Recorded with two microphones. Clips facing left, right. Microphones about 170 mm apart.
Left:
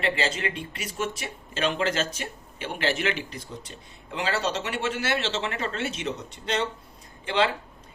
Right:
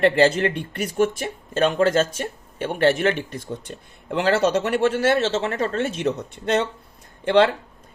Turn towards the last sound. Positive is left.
turn(degrees=-60)  # may be behind; listen again after turning